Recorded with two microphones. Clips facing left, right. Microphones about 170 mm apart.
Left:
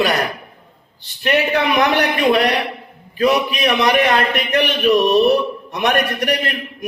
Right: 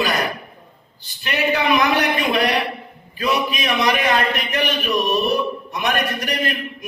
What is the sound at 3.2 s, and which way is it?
A man's voice, 65° left (ahead or behind).